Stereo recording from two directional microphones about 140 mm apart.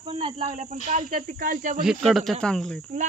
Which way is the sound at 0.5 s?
65° right (ahead or behind).